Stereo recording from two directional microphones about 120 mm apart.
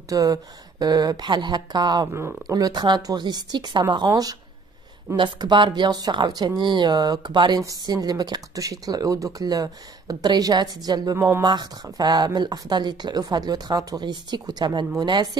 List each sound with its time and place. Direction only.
0.1 s speech: 30° right (ahead or behind)